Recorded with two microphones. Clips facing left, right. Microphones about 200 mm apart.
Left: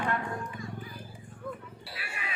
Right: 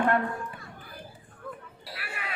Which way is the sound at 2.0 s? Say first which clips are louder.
Right 3 dB; 60° right (ahead or behind).